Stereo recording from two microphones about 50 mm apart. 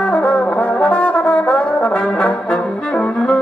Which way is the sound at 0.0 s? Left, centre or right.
Left.